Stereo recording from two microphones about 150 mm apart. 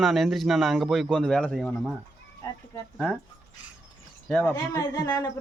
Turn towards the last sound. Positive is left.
turn(degrees=25)  # may be behind; listen again after turning